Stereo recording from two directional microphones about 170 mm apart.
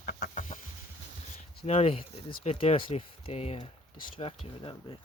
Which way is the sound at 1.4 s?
40° left (ahead or behind).